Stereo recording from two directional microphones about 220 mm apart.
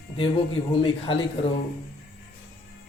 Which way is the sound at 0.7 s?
25° left (ahead or behind).